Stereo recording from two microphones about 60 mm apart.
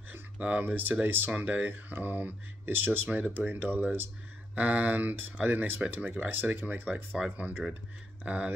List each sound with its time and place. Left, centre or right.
0.1 s speech: right